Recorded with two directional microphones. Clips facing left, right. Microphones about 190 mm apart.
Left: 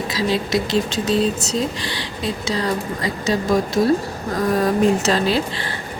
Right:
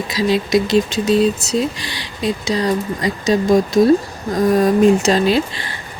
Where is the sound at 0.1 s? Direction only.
15° right (ahead or behind).